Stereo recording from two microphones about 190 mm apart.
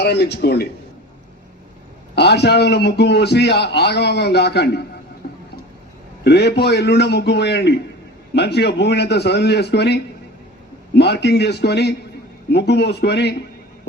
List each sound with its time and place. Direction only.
0.0 s a man's voice: 60° left (ahead or behind)
2.1 s a man's voice: 60° left (ahead or behind)
6.2 s a man's voice: 60° left (ahead or behind)